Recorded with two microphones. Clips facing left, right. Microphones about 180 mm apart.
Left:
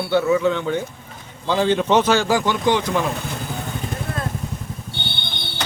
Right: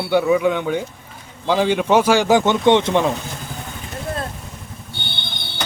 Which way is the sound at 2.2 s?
20° right (ahead or behind).